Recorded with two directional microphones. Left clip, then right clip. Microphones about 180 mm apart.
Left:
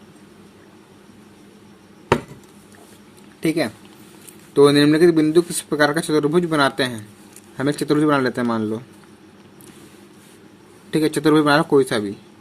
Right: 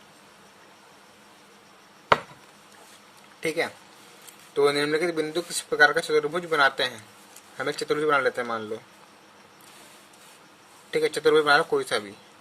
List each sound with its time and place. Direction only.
3.4 s a man's voice: 25° left (ahead or behind)
10.9 s a man's voice: 35° left (ahead or behind)